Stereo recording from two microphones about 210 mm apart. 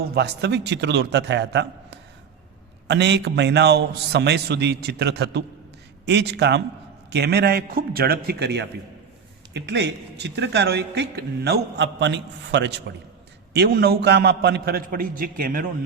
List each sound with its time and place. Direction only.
0.0 s a man's voice: 50° right (ahead or behind)